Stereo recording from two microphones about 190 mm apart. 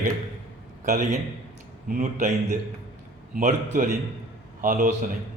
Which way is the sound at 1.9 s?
45° right (ahead or behind).